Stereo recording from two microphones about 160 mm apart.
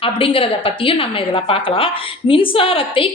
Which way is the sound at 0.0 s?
35° left (ahead or behind).